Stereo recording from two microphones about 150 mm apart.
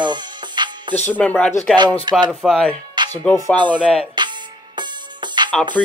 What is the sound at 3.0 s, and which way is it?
Music, 30° right (ahead or behind).